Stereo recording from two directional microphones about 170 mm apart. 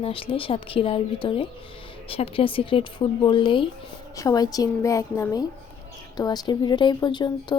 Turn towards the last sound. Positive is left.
turn(degrees=25)  # may be behind; listen again after turning